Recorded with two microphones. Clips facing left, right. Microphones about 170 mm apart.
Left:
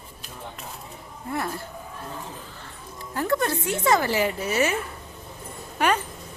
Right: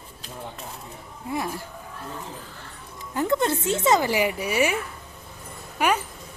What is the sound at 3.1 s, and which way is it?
A woman's voice, 20° right (ahead or behind).